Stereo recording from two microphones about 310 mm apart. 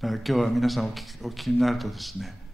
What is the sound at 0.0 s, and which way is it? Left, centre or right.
Speech, centre.